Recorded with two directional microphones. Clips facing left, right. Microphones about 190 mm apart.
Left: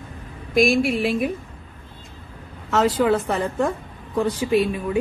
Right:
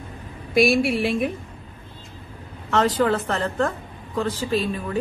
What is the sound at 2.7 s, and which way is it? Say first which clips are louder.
A woman's voice: left 1 dB; 5° left (ahead or behind).